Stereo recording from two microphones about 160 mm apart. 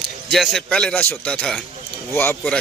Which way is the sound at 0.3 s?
Centre (ahead or behind).